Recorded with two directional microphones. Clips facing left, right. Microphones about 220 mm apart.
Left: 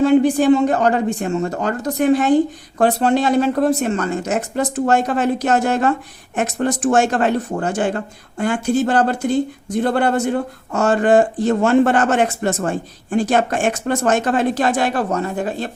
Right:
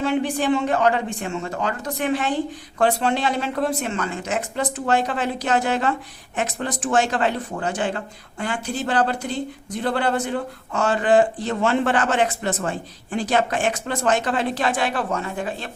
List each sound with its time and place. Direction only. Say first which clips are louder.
0.0 s speech: left 9 dB; 40° left (ahead or behind)